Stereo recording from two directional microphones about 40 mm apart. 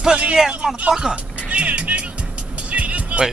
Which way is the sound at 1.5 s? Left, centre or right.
Right.